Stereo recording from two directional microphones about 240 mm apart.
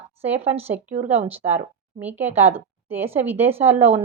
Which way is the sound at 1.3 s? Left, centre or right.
Centre.